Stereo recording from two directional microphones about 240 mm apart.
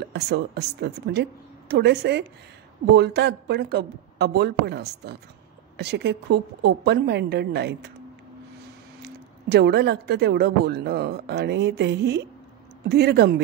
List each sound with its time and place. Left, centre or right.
0.0 s speech: right
9.0 s speech: right